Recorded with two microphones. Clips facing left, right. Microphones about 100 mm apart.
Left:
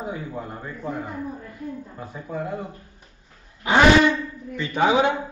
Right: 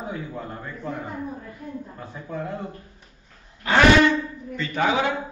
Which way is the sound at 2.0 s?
5° left (ahead or behind).